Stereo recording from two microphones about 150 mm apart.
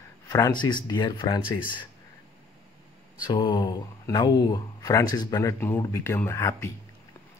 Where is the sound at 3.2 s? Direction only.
30° left (ahead or behind).